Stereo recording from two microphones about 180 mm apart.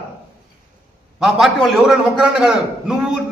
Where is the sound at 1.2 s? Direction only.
Centre (ahead or behind).